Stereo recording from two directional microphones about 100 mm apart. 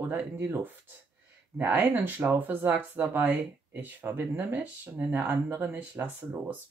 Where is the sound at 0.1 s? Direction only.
30° right (ahead or behind).